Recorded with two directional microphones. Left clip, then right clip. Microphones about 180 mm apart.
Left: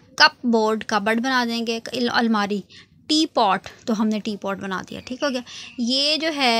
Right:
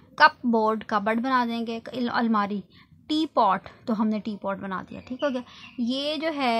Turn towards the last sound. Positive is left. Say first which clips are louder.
# left 5 dB
turn(degrees=20)  # may be behind; listen again after turning